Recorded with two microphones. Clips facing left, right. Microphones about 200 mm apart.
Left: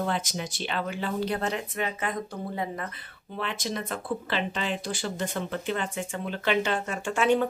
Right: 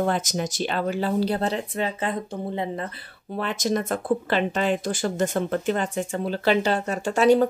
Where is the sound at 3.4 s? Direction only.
45° right (ahead or behind).